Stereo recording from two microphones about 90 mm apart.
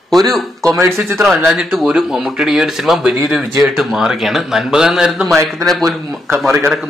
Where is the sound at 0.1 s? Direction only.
Centre (ahead or behind).